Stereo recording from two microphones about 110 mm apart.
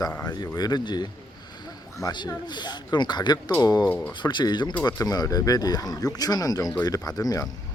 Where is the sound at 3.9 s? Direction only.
15° left (ahead or behind).